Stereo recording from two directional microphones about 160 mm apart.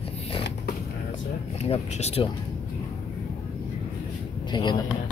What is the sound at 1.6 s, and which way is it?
Speech, 40° left (ahead or behind).